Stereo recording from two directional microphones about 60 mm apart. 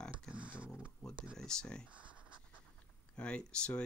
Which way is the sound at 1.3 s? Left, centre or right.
Centre.